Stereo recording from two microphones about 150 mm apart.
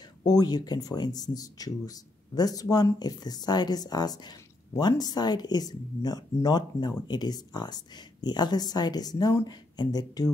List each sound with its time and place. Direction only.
0.2 s speech: 25° left (ahead or behind)